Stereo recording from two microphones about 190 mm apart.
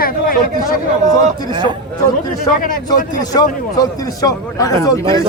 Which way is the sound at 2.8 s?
20° left (ahead or behind).